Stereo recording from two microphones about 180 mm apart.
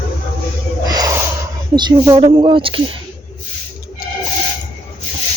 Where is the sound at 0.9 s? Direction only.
20° right (ahead or behind).